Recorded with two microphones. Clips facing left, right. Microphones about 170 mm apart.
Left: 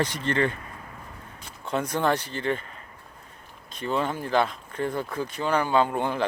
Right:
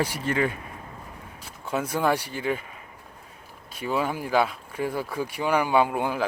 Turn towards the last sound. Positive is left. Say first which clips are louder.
# right 1 dB
turn(degrees=-5)  # may be behind; listen again after turning